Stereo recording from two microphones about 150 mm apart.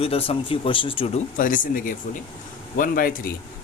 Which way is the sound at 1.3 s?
65° left (ahead or behind).